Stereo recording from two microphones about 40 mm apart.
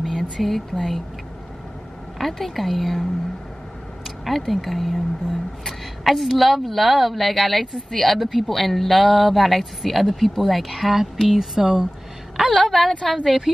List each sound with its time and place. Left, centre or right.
0.0 s a sound: centre
0.7 s a woman's voice: centre
2.1 s speech: centre
4.2 s speech: centre
12.5 s a woman's voice: centre